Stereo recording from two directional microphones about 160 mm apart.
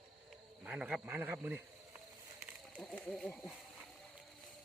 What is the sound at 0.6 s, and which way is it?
Speech, 5° right (ahead or behind).